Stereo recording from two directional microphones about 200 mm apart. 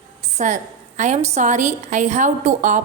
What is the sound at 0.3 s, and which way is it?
A woman's voice, 35° right (ahead or behind).